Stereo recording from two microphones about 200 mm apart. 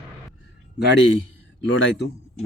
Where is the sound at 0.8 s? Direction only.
60° left (ahead or behind).